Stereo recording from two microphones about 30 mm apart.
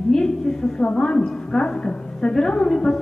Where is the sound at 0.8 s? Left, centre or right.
Left.